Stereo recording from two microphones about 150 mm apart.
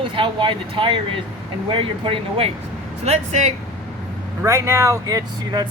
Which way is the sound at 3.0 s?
50° right (ahead or behind).